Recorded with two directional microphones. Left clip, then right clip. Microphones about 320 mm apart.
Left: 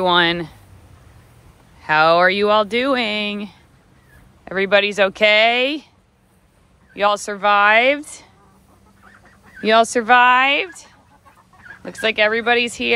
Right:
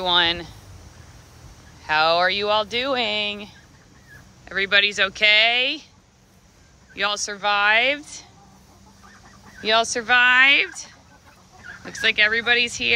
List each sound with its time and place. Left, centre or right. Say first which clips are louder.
0.0 s speech: left 4 dB; centre
1.8 s speech: left 5 dB; centre
7.0 s speech: left 6 dB; centre
9.6 s speech: left 6 dB; centre